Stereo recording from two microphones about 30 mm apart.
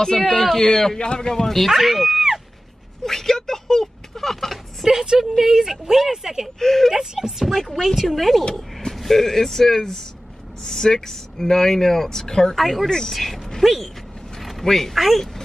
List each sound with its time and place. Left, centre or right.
0.2 s speech: centre
0.9 s a man's voice: left
1.3 s speech: centre
1.7 s speech: centre
3.0 s a sound: centre
4.8 s speech: right
5.2 s a woman's voice: centre
6.6 s speech: centre
6.9 s a woman's voice: centre
7.2 s speech: centre
12.5 s speech: centre
14.4 s a sound: centre
15.0 s speech: centre